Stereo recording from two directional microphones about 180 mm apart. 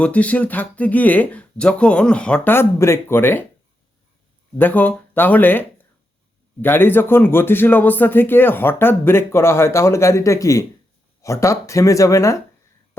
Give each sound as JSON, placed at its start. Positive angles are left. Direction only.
{"t": 0.0, "sound": "a man's voice", "side_deg": 10}
{"t": 4.5, "sound": "a man's voice", "side_deg": 10}